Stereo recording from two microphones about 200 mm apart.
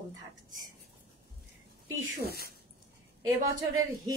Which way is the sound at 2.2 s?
50° left (ahead or behind).